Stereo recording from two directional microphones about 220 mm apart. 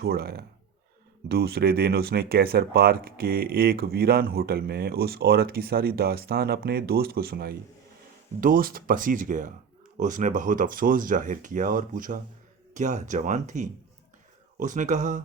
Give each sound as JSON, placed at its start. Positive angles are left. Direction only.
{"t": 0.0, "sound": "speech", "side_deg": -45}